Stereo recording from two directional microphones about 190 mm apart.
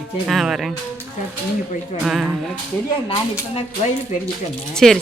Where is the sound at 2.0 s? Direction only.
Centre (ahead or behind).